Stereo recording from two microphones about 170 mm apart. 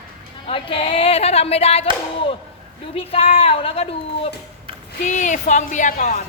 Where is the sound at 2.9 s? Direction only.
35° left (ahead or behind).